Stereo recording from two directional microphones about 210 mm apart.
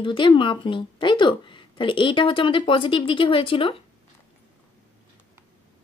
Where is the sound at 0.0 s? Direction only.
25° left (ahead or behind).